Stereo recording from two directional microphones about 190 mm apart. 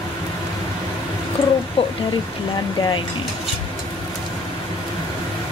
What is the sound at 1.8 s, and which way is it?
Speech, 30° left (ahead or behind).